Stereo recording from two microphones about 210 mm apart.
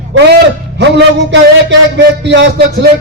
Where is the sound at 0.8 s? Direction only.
55° right (ahead or behind).